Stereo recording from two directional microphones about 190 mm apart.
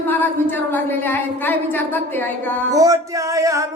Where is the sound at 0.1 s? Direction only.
10° left (ahead or behind).